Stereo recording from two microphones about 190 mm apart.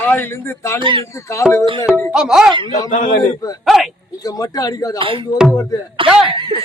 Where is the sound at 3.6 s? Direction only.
Centre (ahead or behind).